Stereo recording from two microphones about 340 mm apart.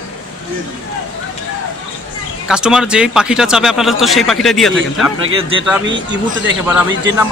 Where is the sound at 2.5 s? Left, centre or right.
Centre.